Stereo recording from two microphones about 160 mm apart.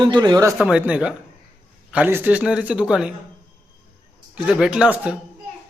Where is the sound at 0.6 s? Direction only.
10° right (ahead or behind).